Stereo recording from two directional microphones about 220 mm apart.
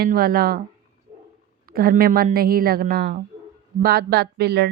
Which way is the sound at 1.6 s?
40° right (ahead or behind).